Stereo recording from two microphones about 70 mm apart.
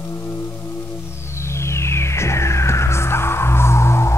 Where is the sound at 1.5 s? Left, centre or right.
Left.